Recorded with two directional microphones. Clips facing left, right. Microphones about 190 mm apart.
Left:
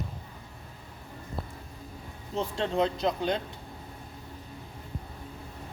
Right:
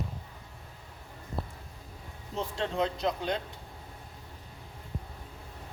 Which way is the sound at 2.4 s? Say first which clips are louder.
Left 3 dB; 30° left (ahead or behind).